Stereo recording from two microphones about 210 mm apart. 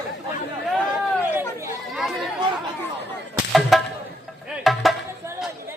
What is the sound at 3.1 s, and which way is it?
Whip, centre (ahead or behind).